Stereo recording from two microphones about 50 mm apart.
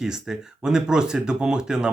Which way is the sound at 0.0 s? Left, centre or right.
Centre.